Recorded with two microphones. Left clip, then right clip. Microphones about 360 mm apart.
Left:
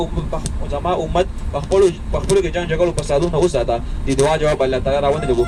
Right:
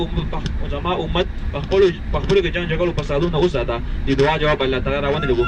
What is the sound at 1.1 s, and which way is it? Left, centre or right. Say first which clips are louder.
Speech: left 4 dB; left.